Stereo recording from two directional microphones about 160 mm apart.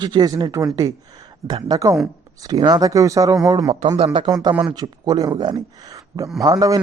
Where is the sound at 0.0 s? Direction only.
25° right (ahead or behind).